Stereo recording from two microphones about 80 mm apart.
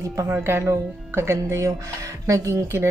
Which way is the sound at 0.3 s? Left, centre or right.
Right.